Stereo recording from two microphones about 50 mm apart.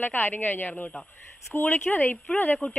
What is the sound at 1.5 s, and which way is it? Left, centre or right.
Speech, left.